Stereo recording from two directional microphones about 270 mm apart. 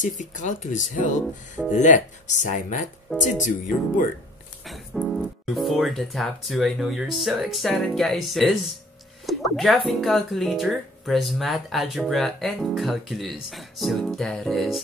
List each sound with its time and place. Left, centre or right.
0.0 s speech: left
4.6 s speech: centre